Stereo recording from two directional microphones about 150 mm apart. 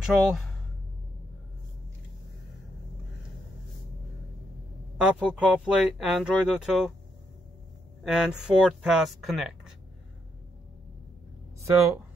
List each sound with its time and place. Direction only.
0.0 s speech: centre (ahead or behind)
4.9 s speech: 5° right (ahead or behind)
8.0 s speech: 5° right (ahead or behind)
11.6 s speech: 20° right (ahead or behind)